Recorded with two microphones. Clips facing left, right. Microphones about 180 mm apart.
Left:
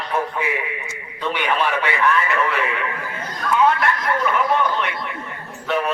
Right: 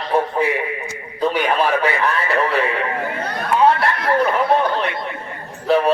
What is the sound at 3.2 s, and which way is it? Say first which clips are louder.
Chatter: right 3 dB; 65° right (ahead or behind).